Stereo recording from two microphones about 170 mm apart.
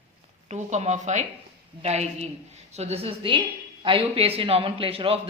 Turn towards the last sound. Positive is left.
turn(degrees=-35)  # may be behind; listen again after turning